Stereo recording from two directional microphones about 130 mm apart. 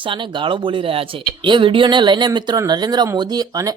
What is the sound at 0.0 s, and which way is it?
Speech, 40° right (ahead or behind).